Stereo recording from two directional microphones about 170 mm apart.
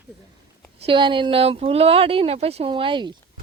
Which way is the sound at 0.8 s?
30° right (ahead or behind).